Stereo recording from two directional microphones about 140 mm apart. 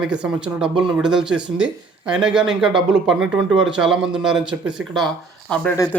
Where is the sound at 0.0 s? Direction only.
5° right (ahead or behind).